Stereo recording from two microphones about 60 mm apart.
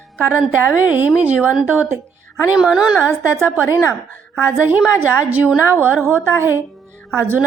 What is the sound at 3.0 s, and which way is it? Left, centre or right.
A woman's voice, right.